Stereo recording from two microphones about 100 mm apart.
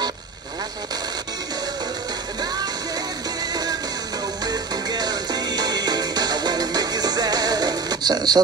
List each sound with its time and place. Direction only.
4.5 s music: 40° right (ahead or behind)